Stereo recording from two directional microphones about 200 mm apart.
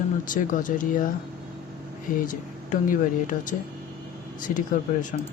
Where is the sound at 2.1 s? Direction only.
40° left (ahead or behind).